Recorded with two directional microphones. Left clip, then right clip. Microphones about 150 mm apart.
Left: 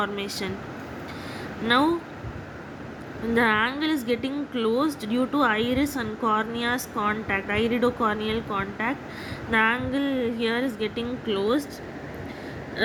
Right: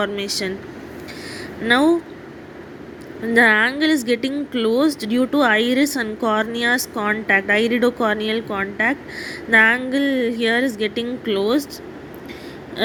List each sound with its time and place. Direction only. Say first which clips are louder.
0.0 s a woman's voice: right 6 dB; 25° right (ahead or behind)
1.6 s a woman's voice: right 6 dB; 25° right (ahead or behind)
3.3 s a woman's voice: right 8 dB; 30° right (ahead or behind)